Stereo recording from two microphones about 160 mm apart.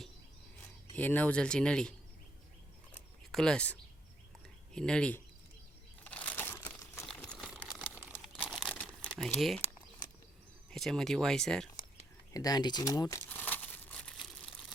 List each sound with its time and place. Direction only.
0.9 s speech: 10° left (ahead or behind)
2.9 s a sound: 5° left (ahead or behind)
4.7 s speech: 5° left (ahead or behind)
6.1 s crunch: 10° left (ahead or behind)
7.0 s a sound: 5° left (ahead or behind)
8.2 s crumpling: centre (ahead or behind)
10.7 s speech: centre (ahead or behind)
12.3 s speech: 25° left (ahead or behind)
13.2 s crumpling: 10° left (ahead or behind)